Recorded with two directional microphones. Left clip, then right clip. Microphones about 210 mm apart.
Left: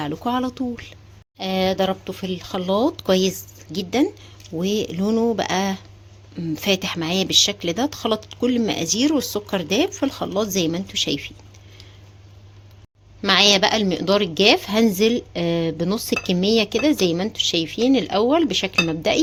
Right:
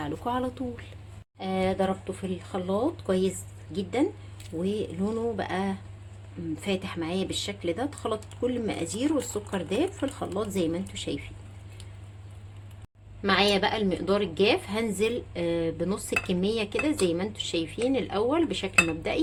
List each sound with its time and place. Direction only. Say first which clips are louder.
0.0 s a woman's voice: left 6 dB; 40° left (ahead or behind)
13.2 s a woman's voice: left 8 dB; 50° left (ahead or behind)